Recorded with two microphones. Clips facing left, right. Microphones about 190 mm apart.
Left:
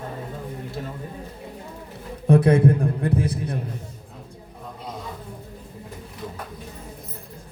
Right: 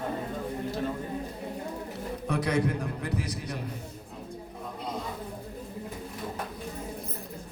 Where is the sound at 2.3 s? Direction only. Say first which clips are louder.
Left 11 dB; 30° left (ahead or behind).